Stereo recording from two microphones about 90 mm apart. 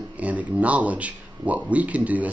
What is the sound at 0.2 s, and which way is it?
A man's voice, 15° right (ahead or behind).